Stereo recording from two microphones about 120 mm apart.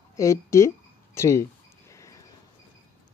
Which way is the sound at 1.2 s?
25° left (ahead or behind).